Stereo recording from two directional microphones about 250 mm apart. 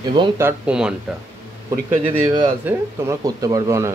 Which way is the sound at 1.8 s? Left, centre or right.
Centre.